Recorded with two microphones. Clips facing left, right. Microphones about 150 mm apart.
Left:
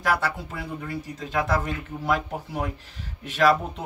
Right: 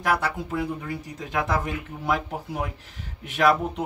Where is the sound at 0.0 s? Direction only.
15° right (ahead or behind).